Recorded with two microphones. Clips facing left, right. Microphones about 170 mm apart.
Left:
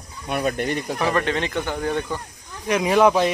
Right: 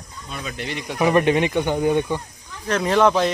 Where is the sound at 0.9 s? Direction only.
15° right (ahead or behind).